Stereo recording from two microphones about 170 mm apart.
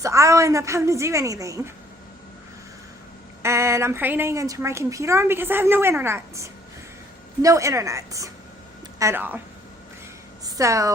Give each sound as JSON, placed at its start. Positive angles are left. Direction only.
{"t": 0.0, "sound": "speech", "side_deg": -20}
{"t": 3.4, "sound": "a woman's voice", "side_deg": -15}
{"t": 10.4, "sound": "a woman's voice", "side_deg": -20}